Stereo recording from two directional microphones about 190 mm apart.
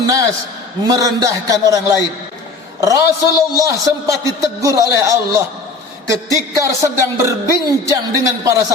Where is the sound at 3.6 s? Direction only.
15° right (ahead or behind).